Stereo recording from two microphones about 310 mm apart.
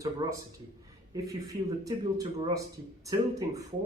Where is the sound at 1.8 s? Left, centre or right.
Centre.